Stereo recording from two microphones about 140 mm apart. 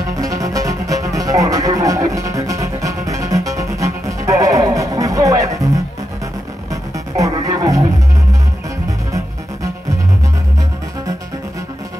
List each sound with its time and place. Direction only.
0.1 s music: 25° right (ahead or behind)
6.7 s music: 25° right (ahead or behind)
9.1 s music: 25° right (ahead or behind)